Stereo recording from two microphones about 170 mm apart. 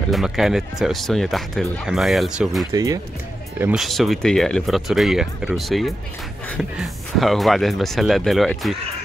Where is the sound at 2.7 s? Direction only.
20° right (ahead or behind).